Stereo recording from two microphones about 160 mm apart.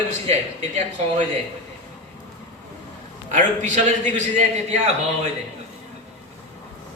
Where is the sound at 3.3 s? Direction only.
50° right (ahead or behind).